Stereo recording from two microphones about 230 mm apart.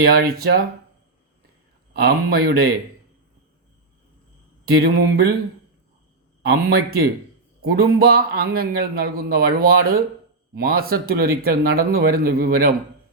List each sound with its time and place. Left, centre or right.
0.0 s speech: right
2.0 s speech: right
4.8 s speech: right
6.5 s a man's voice: right